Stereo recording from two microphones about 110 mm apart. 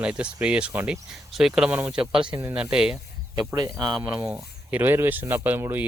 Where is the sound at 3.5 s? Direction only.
40° right (ahead or behind).